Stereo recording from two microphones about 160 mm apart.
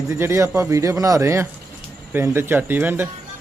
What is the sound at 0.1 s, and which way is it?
A man's voice, 15° right (ahead or behind).